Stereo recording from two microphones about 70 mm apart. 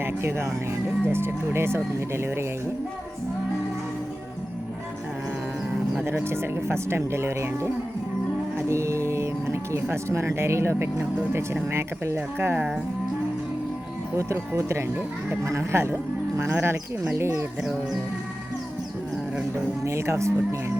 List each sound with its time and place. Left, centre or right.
0.0 s speech: right
6.1 s speech: right
8.7 s speech: right
14.2 s speech: right
19.8 s speech: right